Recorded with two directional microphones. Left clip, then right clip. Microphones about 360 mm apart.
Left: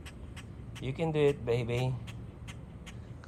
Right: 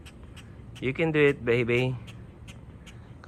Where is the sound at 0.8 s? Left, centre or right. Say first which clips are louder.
Right 7 dB; centre.